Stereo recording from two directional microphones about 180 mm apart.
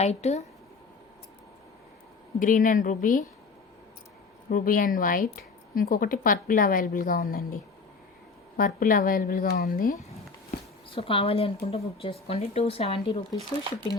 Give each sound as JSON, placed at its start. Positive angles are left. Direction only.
{"t": 0.0, "sound": "a woman's voice", "side_deg": 35}
{"t": 2.4, "sound": "speech", "side_deg": 50}
{"t": 4.4, "sound": "speech", "side_deg": 50}
{"t": 10.9, "sound": "a woman's voice", "side_deg": 30}